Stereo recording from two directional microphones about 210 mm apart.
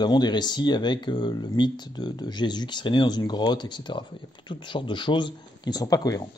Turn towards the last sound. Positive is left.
turn(degrees=15)  # may be behind; listen again after turning